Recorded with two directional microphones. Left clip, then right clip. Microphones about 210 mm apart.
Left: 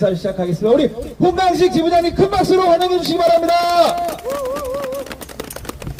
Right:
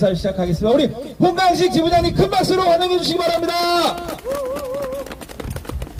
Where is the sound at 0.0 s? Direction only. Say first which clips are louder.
Left 1 dB; 50° right (ahead or behind).